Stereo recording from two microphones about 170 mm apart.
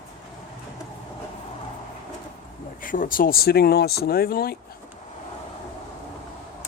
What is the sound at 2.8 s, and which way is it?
Speech, 55° left (ahead or behind).